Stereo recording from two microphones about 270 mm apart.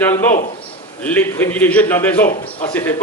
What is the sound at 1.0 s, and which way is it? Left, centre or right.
Speech, centre.